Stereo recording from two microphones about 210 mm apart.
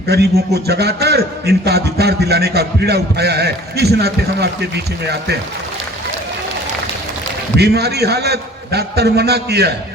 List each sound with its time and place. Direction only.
0.1 s a man's voice: 50° right (ahead or behind)
7.5 s a man's voice: 50° right (ahead or behind)